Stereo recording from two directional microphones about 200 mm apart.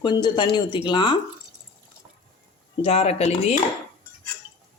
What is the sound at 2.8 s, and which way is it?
Speech, 30° left (ahead or behind).